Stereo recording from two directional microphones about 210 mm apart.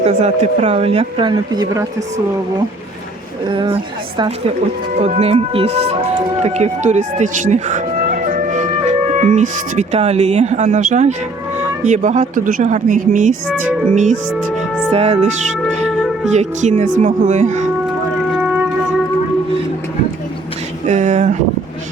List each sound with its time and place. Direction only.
0.0 s speech: 30° right (ahead or behind); by 2.0 s 15° right (ahead or behind)
3.5 s speech: 25° right (ahead or behind)
4.9 s speech: 30° right (ahead or behind)
16.3 s speech: 35° right (ahead or behind)
20.8 s a sound: 35° right (ahead or behind)